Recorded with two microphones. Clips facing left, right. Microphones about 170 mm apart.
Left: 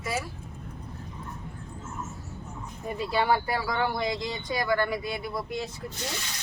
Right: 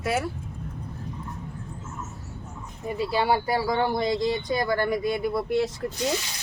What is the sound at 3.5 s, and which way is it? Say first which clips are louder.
Speech: right 4 dB; 30° right (ahead or behind).